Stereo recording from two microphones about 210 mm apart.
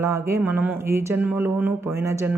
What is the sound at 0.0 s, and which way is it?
A woman's voice, 10° right (ahead or behind).